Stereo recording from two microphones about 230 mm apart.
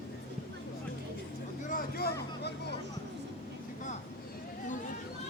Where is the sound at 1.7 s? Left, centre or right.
Left.